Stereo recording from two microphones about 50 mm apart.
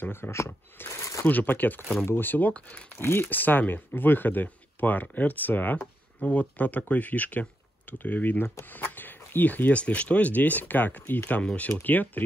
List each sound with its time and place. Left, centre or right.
0.0 s speech: left
0.8 s a sound: left
1.2 s speech: left
3.0 s speech: left